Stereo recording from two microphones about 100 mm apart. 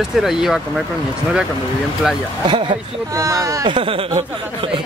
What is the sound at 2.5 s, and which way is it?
Speech, 55° right (ahead or behind).